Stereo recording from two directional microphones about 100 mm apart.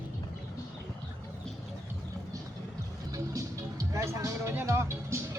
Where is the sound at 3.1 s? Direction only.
35° right (ahead or behind).